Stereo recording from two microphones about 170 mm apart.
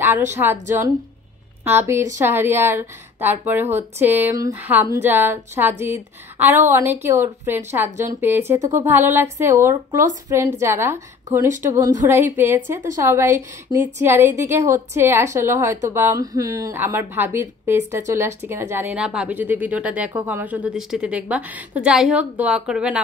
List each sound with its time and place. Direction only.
0.4 s a woman's voice: 10° right (ahead or behind)